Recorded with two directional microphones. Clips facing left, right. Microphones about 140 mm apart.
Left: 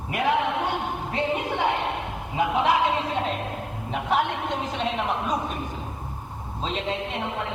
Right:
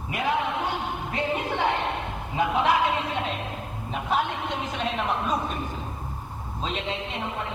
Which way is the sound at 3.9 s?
75° left (ahead or behind).